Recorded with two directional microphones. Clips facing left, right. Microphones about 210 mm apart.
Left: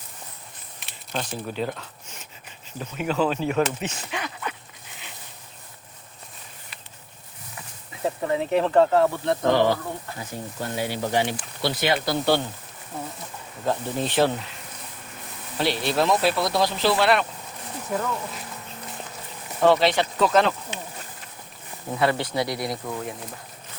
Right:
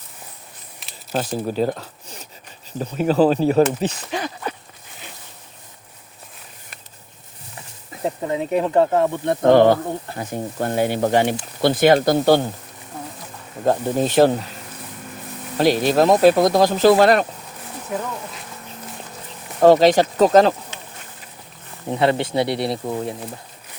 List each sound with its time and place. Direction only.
1.1 s speech: 40° right (ahead or behind)
8.0 s speech: 20° right (ahead or behind)
9.4 s speech: 50° right (ahead or behind)
13.7 s speech: 45° right (ahead or behind)
15.5 s speech: 45° right (ahead or behind)
19.6 s speech: 40° right (ahead or behind)
21.8 s speech: 25° right (ahead or behind)